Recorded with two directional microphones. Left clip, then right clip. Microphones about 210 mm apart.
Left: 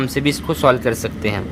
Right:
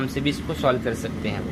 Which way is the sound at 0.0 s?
35° left (ahead or behind).